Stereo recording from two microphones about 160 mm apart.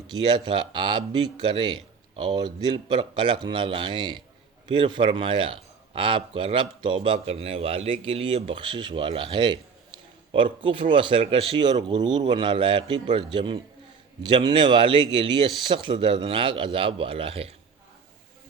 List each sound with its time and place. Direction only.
0.1 s a man's voice: 30° right (ahead or behind)